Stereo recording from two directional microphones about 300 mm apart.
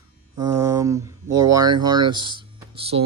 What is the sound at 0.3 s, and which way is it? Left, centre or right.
Speech, centre.